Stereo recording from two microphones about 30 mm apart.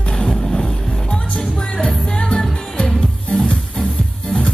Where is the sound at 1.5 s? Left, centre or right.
Left.